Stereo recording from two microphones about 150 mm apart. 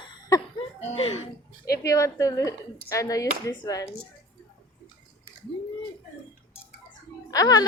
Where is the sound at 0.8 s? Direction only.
45° left (ahead or behind).